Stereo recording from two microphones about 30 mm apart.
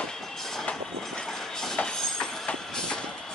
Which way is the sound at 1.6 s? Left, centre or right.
Left.